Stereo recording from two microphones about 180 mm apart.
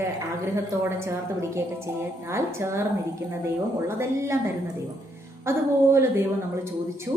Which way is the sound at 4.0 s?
15° right (ahead or behind).